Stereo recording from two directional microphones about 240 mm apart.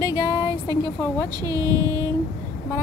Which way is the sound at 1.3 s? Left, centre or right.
Centre.